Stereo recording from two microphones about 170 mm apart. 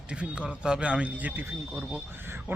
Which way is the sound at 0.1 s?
5° right (ahead or behind).